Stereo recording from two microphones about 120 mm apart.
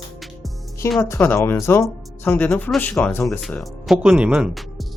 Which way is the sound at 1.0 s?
20° left (ahead or behind).